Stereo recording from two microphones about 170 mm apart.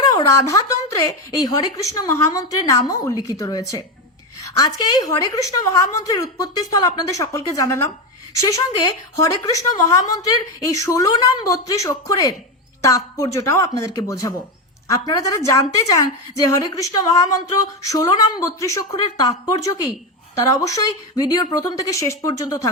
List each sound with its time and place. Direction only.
0.0 s a woman's voice: 20° left (ahead or behind)